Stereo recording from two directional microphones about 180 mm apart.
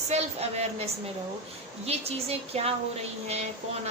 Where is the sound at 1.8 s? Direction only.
35° right (ahead or behind).